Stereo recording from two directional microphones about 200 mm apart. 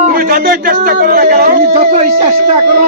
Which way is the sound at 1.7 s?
30° right (ahead or behind).